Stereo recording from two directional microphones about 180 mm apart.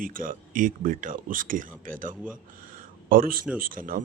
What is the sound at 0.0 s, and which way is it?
Speech, 50° right (ahead or behind).